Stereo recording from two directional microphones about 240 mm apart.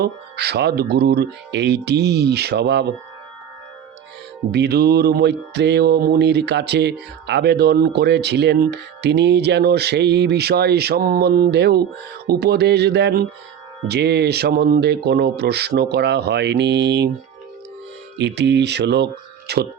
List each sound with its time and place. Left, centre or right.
0.0 s mantra: right
4.5 s mantra: right
18.2 s mantra: right